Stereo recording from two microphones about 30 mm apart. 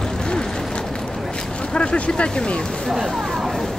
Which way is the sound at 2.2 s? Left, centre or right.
Left.